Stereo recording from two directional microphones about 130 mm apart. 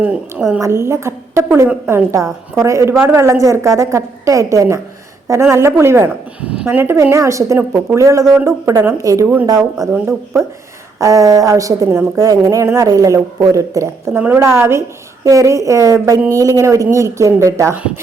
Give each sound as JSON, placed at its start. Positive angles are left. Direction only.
{"t": 0.0, "sound": "a woman's voice", "side_deg": -10}
{"t": 0.6, "sound": "a woman's voice", "side_deg": -20}
{"t": 9.7, "sound": "speech", "side_deg": 0}
{"t": 11.0, "sound": "a woman's voice", "side_deg": -25}